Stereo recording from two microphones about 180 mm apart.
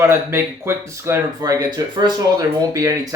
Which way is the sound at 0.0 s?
15° right (ahead or behind).